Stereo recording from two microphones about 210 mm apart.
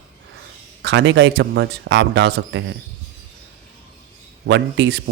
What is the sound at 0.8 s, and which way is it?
Speech, 55° right (ahead or behind).